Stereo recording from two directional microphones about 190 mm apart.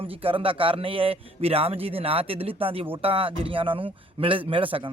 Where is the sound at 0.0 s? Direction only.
30° right (ahead or behind).